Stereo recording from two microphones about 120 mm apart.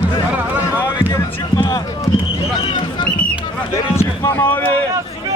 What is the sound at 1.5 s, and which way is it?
Run, 35° left (ahead or behind).